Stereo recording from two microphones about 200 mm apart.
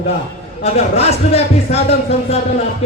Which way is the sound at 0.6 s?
30° left (ahead or behind).